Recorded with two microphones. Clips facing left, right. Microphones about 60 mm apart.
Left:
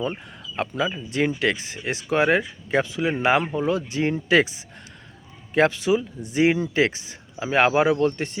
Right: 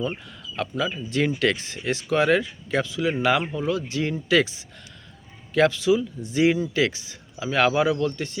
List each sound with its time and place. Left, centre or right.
0.5 s speech: left